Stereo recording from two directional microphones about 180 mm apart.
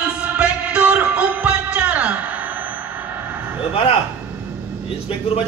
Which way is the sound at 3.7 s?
30° left (ahead or behind).